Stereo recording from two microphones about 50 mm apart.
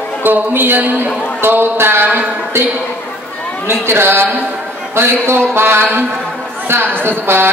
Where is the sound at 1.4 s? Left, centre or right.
Right.